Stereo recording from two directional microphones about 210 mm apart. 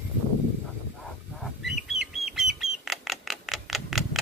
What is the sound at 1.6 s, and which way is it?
Bird, centre (ahead or behind).